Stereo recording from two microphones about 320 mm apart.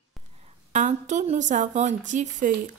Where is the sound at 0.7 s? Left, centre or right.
Right.